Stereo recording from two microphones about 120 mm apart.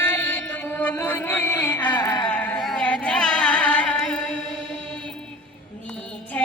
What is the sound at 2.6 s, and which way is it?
Music, 10° left (ahead or behind).